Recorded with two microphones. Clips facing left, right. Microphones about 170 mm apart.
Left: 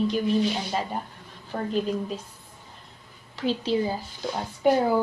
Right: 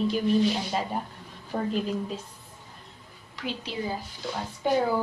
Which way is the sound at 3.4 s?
30° left (ahead or behind).